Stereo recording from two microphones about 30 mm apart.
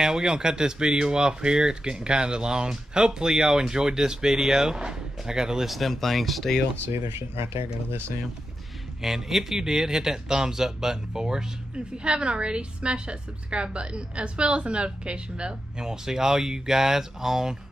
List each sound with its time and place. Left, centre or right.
0.0 s speech: centre
5.7 s speech: centre
9.0 s speech: centre; by 15.5 s right
15.8 s speech: centre